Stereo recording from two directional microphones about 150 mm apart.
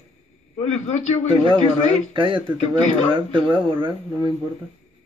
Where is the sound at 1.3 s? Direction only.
35° right (ahead or behind).